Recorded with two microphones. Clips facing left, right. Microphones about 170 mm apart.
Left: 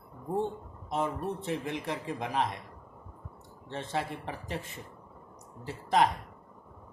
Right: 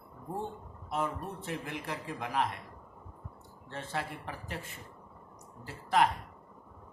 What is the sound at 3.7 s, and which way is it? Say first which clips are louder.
Speech: left 4 dB; 20° left (ahead or behind).